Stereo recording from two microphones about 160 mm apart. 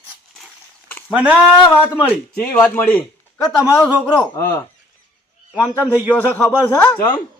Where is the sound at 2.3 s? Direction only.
10° left (ahead or behind).